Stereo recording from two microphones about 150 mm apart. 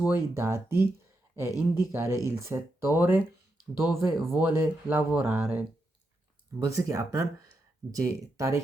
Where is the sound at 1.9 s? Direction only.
15° right (ahead or behind).